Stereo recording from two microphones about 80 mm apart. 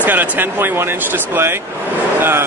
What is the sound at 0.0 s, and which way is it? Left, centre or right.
Speech, right.